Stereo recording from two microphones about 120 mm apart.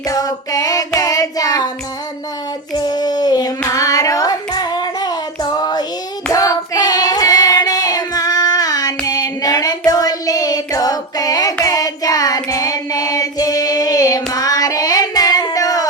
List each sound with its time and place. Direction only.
0.1 s female singing: 30° left (ahead or behind)
0.9 s child singing: 30° left (ahead or behind)
2.7 s a sound: 35° left (ahead or behind)
3.6 s child singing: 30° left (ahead or behind)